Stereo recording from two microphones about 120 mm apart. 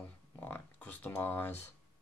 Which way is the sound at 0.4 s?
15° left (ahead or behind).